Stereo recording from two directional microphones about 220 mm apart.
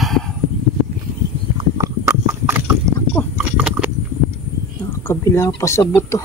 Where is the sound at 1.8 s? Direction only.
10° right (ahead or behind).